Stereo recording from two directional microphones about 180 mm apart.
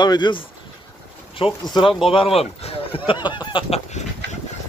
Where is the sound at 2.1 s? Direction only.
30° left (ahead or behind).